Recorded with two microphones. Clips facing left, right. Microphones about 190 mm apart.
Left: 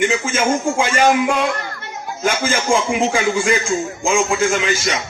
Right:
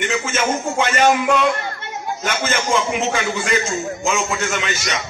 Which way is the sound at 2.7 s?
30° left (ahead or behind).